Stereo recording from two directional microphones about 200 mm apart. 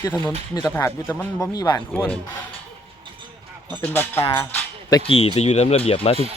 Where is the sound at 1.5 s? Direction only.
20° left (ahead or behind).